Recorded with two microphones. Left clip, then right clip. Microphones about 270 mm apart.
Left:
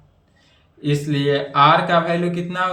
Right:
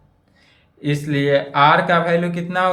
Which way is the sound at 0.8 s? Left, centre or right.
Centre.